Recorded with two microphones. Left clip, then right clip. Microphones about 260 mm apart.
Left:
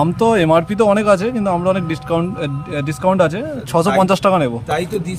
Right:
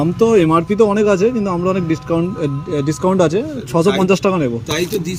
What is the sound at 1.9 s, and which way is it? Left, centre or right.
Speech, centre.